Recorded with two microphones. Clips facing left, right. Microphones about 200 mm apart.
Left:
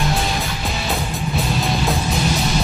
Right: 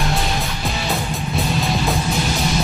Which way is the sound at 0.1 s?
Centre (ahead or behind).